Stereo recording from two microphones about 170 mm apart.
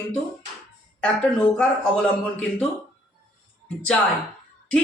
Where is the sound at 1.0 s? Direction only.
5° left (ahead or behind).